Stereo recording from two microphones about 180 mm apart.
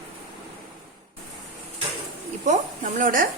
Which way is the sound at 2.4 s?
45° right (ahead or behind).